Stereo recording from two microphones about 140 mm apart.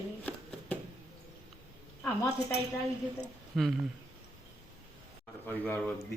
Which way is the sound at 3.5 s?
Centre (ahead or behind).